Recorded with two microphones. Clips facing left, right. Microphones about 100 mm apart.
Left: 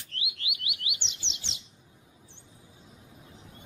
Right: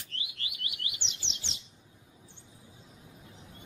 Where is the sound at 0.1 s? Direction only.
Centre (ahead or behind).